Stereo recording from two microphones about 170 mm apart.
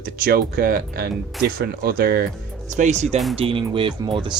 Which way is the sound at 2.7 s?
45° right (ahead or behind).